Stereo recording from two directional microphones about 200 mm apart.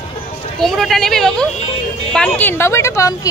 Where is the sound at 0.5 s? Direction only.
Centre (ahead or behind).